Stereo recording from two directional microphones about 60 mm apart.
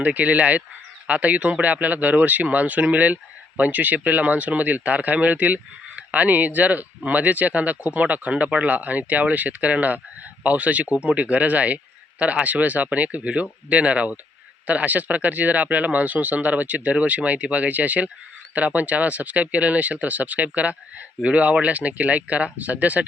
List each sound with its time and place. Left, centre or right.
0.0 s speech: right